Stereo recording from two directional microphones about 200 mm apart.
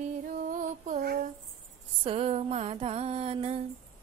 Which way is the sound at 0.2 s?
40° right (ahead or behind).